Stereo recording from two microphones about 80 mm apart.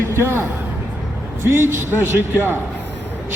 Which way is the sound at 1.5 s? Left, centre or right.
Right.